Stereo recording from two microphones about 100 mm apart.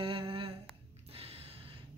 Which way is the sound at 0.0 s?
60° right (ahead or behind).